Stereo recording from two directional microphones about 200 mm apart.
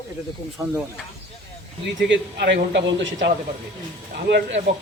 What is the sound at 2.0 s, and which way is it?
Speech, 60° right (ahead or behind).